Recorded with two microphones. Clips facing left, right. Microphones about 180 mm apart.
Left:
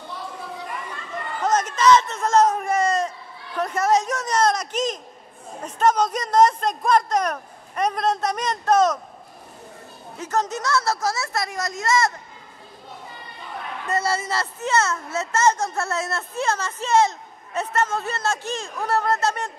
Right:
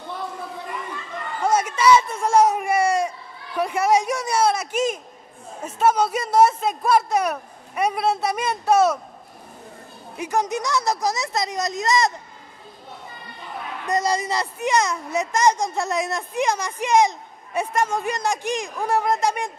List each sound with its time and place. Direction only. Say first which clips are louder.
1.4 s a man's voice: right 1 dB; 10° right (ahead or behind)
10.1 s speech: right 2 dB; 15° right (ahead or behind)
13.8 s speech: right 2 dB; 15° right (ahead or behind)